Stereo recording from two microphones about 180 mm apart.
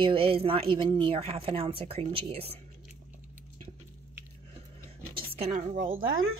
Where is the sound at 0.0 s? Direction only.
30° right (ahead or behind).